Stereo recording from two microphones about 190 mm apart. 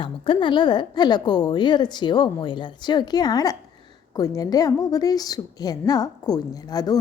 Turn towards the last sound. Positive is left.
turn(degrees=20)  # may be behind; listen again after turning